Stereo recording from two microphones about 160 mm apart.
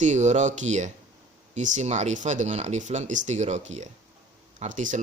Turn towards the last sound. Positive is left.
turn(degrees=-50)  # may be behind; listen again after turning